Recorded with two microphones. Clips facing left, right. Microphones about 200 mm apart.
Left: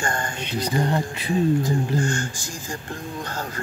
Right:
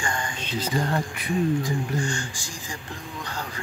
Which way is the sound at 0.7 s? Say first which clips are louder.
Left 3 dB; 20° left (ahead or behind).